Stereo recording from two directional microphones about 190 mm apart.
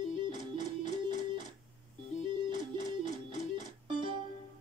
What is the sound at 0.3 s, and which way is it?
Music, 40° left (ahead or behind).